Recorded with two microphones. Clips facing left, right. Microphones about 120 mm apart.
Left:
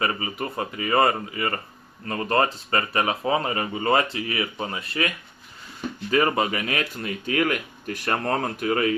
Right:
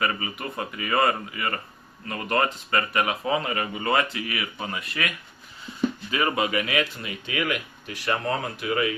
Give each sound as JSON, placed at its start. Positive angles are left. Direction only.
{"t": 0.0, "sound": "speech", "side_deg": 30}